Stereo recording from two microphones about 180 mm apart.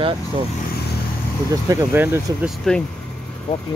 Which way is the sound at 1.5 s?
15° right (ahead or behind).